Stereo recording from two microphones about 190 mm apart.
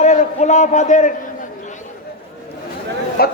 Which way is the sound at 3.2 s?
55° left (ahead or behind).